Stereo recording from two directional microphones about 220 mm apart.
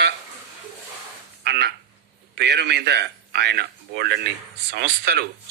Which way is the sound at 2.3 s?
50° right (ahead or behind).